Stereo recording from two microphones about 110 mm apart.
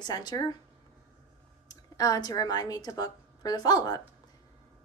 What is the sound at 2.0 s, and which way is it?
Speech, 35° left (ahead or behind).